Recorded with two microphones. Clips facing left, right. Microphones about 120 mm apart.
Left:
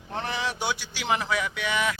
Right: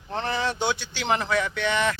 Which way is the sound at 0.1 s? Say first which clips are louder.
Right 3 dB; 5° left (ahead or behind).